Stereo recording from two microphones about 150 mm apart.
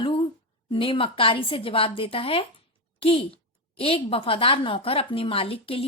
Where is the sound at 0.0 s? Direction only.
35° left (ahead or behind).